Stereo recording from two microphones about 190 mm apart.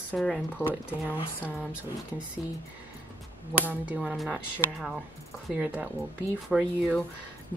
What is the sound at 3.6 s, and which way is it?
Speech, 5° right (ahead or behind).